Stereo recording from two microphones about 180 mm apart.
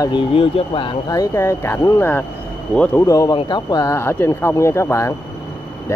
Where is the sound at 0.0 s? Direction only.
30° left (ahead or behind); by 3.0 s 5° left (ahead or behind).